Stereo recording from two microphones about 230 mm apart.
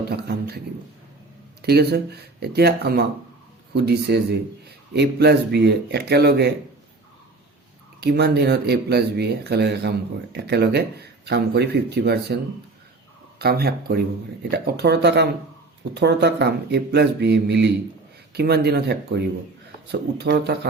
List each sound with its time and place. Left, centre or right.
0.1 s speech: right
1.6 s speech: right
8.0 s speech: right
13.4 s speech: right